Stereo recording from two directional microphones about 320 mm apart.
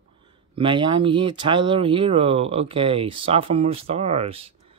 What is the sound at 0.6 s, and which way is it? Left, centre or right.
Speech, centre.